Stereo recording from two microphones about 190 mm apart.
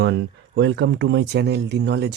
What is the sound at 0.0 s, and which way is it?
Speech, 70° right (ahead or behind).